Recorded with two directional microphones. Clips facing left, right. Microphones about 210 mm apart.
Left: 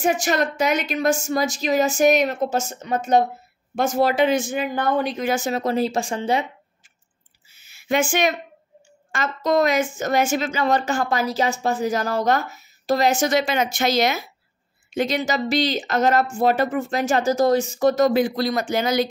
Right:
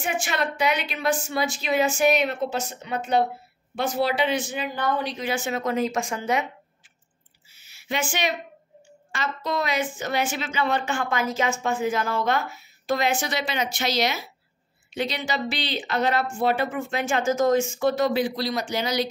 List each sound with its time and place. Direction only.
0.0 s speech: 40° left (ahead or behind)
7.4 s a sound: 50° left (ahead or behind)
9.1 s a woman's voice: 45° left (ahead or behind)